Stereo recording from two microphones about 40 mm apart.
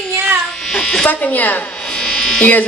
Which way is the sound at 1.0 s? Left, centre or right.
Left.